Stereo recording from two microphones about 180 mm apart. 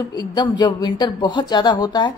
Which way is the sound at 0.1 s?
20° left (ahead or behind).